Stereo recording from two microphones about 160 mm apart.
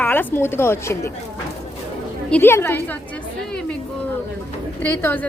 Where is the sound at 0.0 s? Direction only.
10° left (ahead or behind).